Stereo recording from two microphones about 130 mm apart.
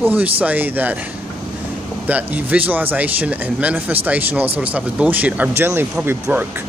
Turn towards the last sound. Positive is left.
turn(degrees=-15)  # may be behind; listen again after turning